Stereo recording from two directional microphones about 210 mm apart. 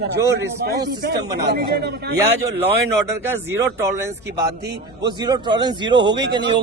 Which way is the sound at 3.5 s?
10° right (ahead or behind).